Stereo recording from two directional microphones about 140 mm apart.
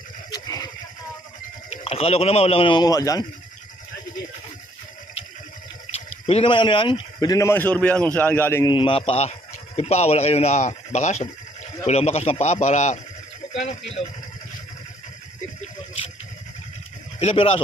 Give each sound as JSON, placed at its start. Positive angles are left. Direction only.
{"t": 0.3, "sound": "a sound", "side_deg": 25}
{"t": 1.7, "sound": "speech", "side_deg": 45}
{"t": 5.9, "sound": "speech", "side_deg": 50}
{"t": 8.6, "sound": "a man's voice", "side_deg": 35}
{"t": 17.2, "sound": "speech", "side_deg": 45}